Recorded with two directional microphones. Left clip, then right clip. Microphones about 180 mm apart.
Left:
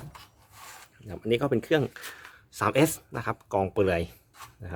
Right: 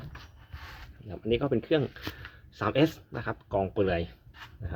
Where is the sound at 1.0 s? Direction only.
15° left (ahead or behind).